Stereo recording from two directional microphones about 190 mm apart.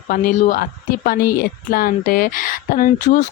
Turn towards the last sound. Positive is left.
turn(degrees=45)  # may be behind; listen again after turning